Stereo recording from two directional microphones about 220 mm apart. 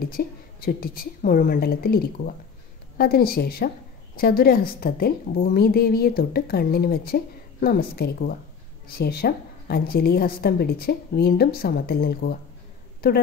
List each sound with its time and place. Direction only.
0.0 s a woman's voice: 45° left (ahead or behind)